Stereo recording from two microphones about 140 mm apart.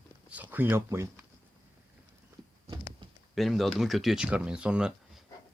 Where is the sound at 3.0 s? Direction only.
35° right (ahead or behind).